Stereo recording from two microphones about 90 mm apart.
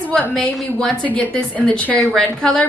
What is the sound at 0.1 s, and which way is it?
A woman's voice, 5° left (ahead or behind).